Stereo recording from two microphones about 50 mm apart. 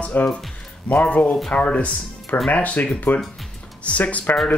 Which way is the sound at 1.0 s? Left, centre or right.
Left.